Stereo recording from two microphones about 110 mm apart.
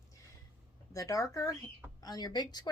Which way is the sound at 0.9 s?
30° left (ahead or behind).